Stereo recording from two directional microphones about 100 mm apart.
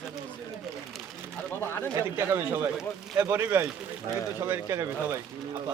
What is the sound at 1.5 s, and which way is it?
Speech, 25° left (ahead or behind).